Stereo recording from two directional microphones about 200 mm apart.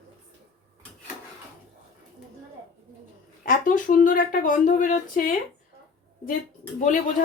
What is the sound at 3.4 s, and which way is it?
Speech, 40° left (ahead or behind).